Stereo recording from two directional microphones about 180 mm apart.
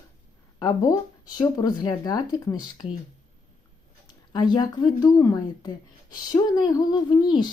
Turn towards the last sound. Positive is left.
turn(degrees=25)  # may be behind; listen again after turning